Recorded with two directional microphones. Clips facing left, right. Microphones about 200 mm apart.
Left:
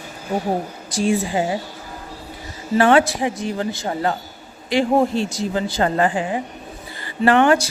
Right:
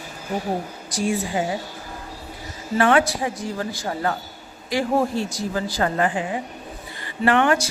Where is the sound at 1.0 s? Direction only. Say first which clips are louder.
Left 4 dB; 25° left (ahead or behind).